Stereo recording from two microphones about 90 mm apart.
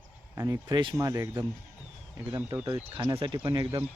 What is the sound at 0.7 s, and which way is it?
Speech, 65° right (ahead or behind).